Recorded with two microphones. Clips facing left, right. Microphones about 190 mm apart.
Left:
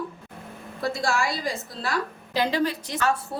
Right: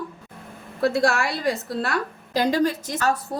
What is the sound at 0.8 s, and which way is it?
A woman's voice, 65° right (ahead or behind).